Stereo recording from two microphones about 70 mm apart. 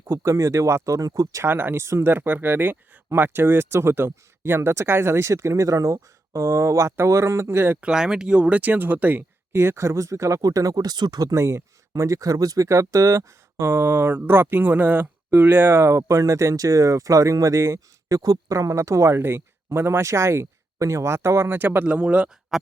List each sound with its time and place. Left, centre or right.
0.0 s speech: right
0.9 s speech: right
1.5 s speech: right
7.8 s speech: centre
9.5 s speech: right
11.3 s speech: right
15.8 s speech: right
18.2 s speech: right
19.2 s speech: right
21.8 s speech: centre